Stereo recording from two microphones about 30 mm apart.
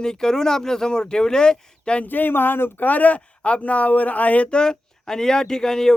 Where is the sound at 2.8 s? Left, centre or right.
Left.